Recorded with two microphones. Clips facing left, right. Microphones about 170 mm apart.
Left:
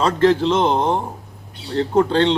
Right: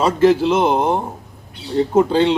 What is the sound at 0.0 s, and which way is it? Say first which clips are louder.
A man's voice: right 2 dB; 10° right (ahead or behind).